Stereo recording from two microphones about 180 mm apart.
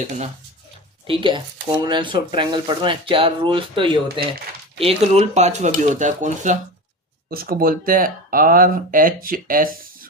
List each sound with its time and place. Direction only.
1.0 s speech: 30° right (ahead or behind)
7.3 s speech: 55° right (ahead or behind)